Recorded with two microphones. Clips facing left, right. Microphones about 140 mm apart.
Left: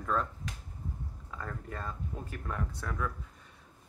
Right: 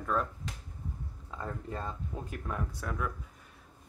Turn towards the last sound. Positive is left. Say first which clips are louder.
# even
turn(degrees=-10)  # may be behind; listen again after turning